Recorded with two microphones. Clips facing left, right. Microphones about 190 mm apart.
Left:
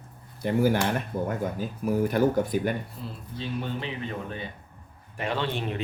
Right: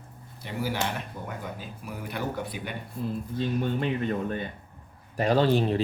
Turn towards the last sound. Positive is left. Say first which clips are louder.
# right 7 dB
turn(degrees=-35)  # may be behind; listen again after turning